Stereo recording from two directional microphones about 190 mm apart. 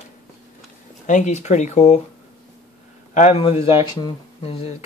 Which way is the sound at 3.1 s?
35° left (ahead or behind).